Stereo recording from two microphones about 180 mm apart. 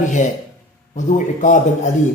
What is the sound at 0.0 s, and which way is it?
A man's voice, 45° left (ahead or behind).